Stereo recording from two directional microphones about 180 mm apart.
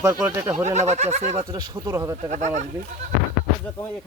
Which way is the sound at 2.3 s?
40° right (ahead or behind).